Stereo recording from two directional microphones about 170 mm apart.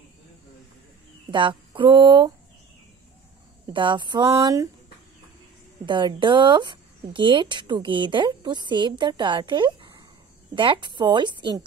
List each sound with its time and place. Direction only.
1.3 s speech: 30° right (ahead or behind)
3.6 s a woman's voice: 30° right (ahead or behind)
5.9 s a woman's voice: 30° right (ahead or behind)